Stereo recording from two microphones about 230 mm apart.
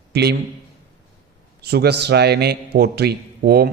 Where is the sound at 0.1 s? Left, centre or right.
Right.